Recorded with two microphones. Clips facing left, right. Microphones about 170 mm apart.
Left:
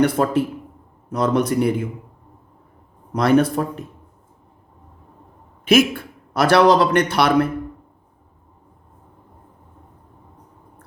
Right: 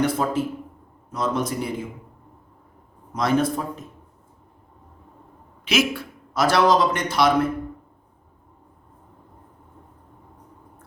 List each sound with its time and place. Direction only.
0.0 s a man's voice: 60° left (ahead or behind)
3.2 s a man's voice: 65° left (ahead or behind)
5.6 s a man's voice: 50° left (ahead or behind)